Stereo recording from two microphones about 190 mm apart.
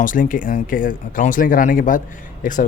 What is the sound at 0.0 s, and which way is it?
Speech, 45° left (ahead or behind).